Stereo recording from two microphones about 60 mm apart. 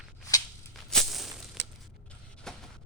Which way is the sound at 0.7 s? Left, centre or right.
Centre.